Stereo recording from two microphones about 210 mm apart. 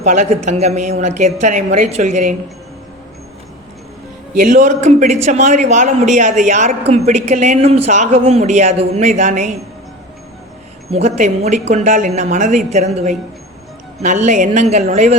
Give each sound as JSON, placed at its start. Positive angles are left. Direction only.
{"t": 0.0, "sound": "a man's voice", "side_deg": -35}
{"t": 4.4, "sound": "a man's voice", "side_deg": -35}
{"t": 10.9, "sound": "a man's voice", "side_deg": -30}